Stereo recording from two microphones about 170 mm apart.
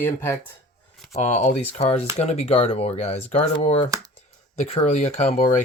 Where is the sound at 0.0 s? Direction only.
15° left (ahead or behind).